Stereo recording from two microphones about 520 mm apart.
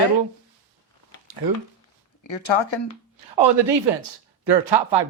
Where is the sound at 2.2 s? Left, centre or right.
Left.